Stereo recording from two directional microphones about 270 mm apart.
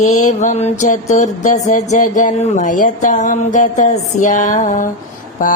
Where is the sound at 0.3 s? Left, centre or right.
Left.